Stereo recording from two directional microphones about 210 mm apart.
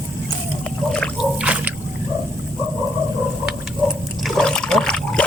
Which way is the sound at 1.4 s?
5° right (ahead or behind).